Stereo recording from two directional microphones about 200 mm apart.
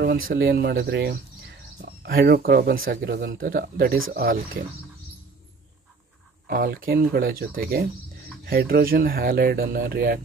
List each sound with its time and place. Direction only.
0.3 s speech: 50° right (ahead or behind)
6.4 s speech: 45° right (ahead or behind)